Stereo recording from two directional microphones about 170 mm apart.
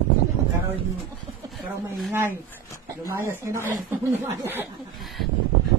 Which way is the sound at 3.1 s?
15° right (ahead or behind).